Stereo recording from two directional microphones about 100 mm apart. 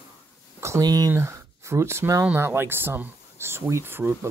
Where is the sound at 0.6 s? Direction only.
30° right (ahead or behind).